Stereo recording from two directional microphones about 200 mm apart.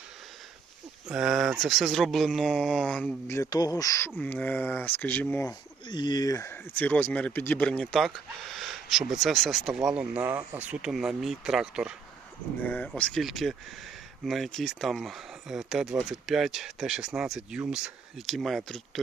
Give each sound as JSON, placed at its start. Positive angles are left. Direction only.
{"t": 1.0, "sound": "speech", "side_deg": -5}
{"t": 5.8, "sound": "speech", "side_deg": 20}
{"t": 8.5, "sound": "a sound", "side_deg": 0}
{"t": 9.2, "sound": "speech", "side_deg": 0}
{"t": 12.6, "sound": "speech", "side_deg": 5}